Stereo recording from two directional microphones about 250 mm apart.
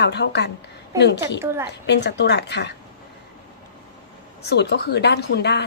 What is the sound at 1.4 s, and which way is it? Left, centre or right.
Speech, centre.